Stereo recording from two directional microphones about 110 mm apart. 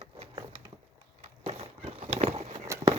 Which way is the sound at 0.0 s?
60° right (ahead or behind).